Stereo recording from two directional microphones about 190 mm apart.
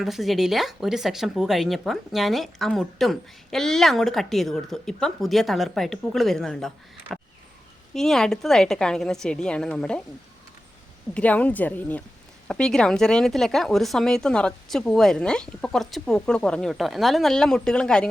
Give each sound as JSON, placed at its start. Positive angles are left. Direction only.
{"t": 0.0, "sound": "speech", "side_deg": 0}
{"t": 11.1, "sound": "speech", "side_deg": 5}